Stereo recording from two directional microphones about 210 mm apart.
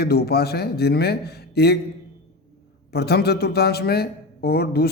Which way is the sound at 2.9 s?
50° left (ahead or behind).